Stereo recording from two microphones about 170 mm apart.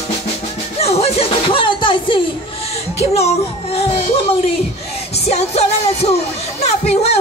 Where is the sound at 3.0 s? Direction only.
40° left (ahead or behind).